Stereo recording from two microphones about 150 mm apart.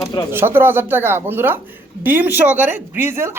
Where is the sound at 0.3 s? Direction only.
15° right (ahead or behind).